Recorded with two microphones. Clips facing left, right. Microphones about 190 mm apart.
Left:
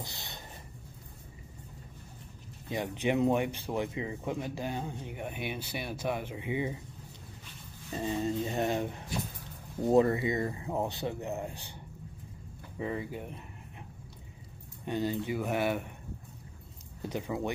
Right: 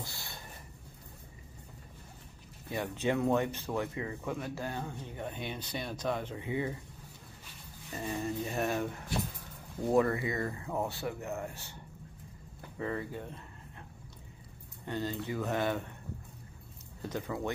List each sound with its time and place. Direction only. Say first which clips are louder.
0.0 s a sound: left 1 dB; 20° left (ahead or behind)
2.7 s speech: left 2 dB; 15° left (ahead or behind)
7.9 s speech: left 4 dB; 20° left (ahead or behind)
12.7 s a sound: left 1 dB; 15° left (ahead or behind)
14.9 s speech: left 4 dB; 15° left (ahead or behind)
17.0 s speech: left 2 dB; 15° left (ahead or behind)